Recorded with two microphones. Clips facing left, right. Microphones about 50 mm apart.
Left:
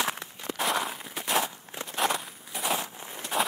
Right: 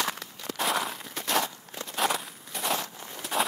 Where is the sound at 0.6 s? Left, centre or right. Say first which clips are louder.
Even; centre.